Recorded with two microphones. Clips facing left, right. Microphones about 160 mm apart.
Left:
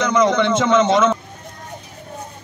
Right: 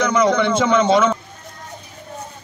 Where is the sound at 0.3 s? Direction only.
20° left (ahead or behind).